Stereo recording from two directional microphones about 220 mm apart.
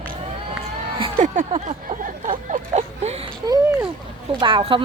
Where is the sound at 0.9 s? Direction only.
25° right (ahead or behind).